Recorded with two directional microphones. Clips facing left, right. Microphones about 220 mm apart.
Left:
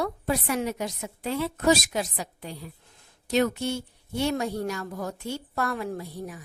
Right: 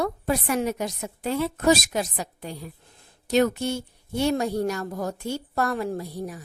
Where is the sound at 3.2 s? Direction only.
45° right (ahead or behind).